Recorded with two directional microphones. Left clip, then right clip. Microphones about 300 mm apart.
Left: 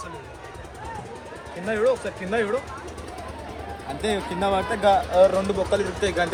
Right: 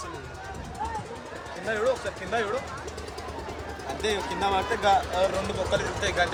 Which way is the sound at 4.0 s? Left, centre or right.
Centre.